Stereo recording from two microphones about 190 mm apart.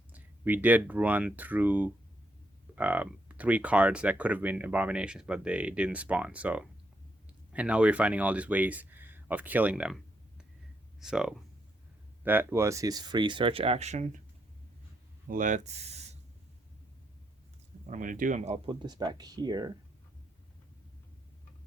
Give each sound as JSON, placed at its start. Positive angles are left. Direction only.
{"t": 0.1, "sound": "speech", "side_deg": -10}
{"t": 15.3, "sound": "speech", "side_deg": -45}
{"t": 17.8, "sound": "speech", "side_deg": -40}